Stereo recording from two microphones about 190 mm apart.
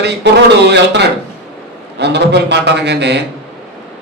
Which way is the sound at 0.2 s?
65° right (ahead or behind).